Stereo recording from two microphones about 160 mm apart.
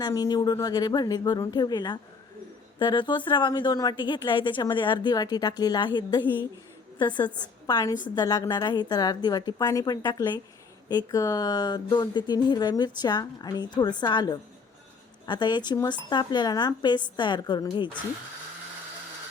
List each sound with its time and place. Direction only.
0.0 s a woman's voice: 25° left (ahead or behind)